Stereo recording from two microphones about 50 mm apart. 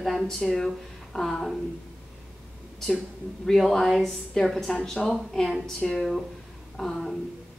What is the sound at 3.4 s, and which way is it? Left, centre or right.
A woman's voice, centre.